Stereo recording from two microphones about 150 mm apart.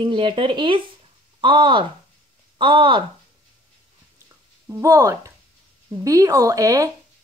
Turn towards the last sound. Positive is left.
turn(degrees=-20)  # may be behind; listen again after turning